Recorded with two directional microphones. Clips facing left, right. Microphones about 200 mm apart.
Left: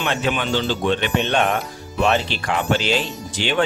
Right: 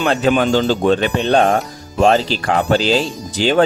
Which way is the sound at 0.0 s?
40° right (ahead or behind).